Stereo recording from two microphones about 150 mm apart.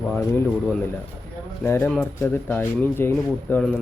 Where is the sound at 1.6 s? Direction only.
15° left (ahead or behind).